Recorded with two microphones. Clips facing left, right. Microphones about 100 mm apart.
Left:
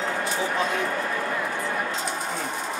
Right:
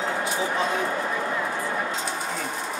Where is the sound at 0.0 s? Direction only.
10° right (ahead or behind).